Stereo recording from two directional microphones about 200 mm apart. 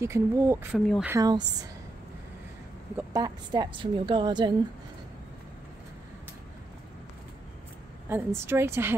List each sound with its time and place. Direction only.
0.0 s a woman's voice: 15° right (ahead or behind)
0.7 s speech: centre (ahead or behind)
1.1 s a woman's voice: 20° right (ahead or behind)
3.1 s a woman's voice: 20° right (ahead or behind)
8.1 s a woman's voice: 10° right (ahead or behind)